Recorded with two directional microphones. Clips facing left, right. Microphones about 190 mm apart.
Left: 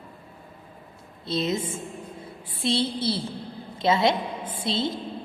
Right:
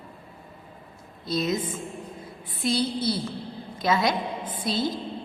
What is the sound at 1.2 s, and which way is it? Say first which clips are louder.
A woman's voice: even; 25° left (ahead or behind).